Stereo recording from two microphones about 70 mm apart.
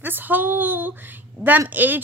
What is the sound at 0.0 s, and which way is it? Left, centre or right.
Speech, right.